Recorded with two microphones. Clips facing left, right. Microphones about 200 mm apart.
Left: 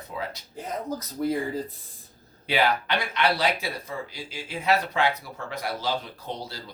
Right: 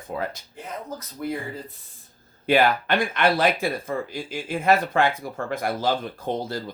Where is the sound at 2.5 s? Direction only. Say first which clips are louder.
Right 5 dB; 50° right (ahead or behind).